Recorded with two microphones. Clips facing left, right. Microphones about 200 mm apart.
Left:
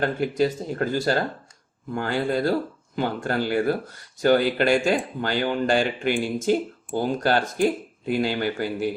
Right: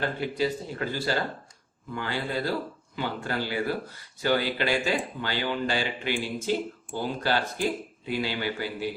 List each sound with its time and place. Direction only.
0.0 s speech: 45° left (ahead or behind)